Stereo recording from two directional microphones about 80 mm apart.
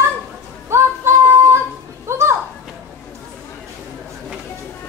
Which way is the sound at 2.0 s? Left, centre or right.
Right.